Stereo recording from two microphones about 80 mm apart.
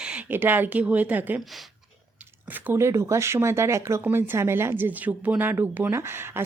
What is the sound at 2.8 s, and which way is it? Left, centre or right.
Speech, right.